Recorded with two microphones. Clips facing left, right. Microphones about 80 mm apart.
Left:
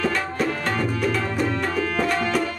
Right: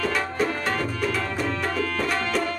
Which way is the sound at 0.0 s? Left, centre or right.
Centre.